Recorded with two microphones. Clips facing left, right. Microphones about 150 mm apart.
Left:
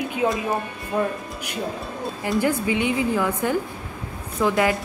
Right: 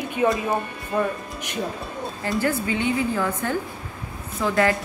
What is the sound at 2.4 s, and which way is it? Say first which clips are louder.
A woman's voice: left 2 dB; 15° left (ahead or behind).